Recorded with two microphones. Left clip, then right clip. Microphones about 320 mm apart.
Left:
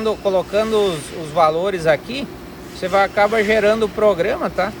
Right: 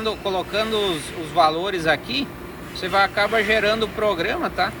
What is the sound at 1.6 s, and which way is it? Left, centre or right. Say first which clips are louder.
Speech: left 4 dB; left.